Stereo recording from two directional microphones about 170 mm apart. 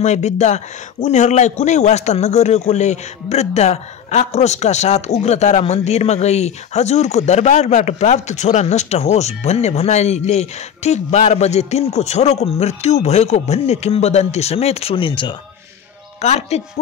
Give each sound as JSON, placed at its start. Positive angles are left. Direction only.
{"t": 0.0, "sound": "a man's voice", "side_deg": 40}